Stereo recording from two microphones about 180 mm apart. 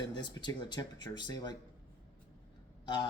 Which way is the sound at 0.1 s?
25° left (ahead or behind).